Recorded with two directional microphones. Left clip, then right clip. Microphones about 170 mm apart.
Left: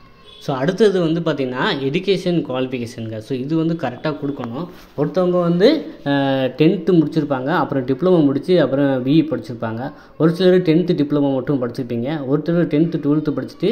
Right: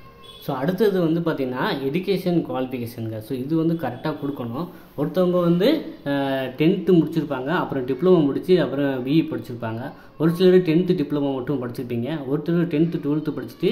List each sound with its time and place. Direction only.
0.5 s speech: 20° left (ahead or behind)
5.6 s speech: 30° left (ahead or behind)